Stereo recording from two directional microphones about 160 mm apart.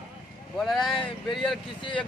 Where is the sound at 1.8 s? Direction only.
30° left (ahead or behind).